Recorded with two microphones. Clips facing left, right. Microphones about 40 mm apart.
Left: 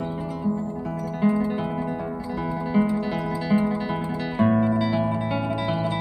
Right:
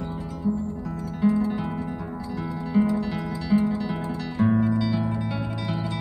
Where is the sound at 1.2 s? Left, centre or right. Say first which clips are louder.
Even; centre.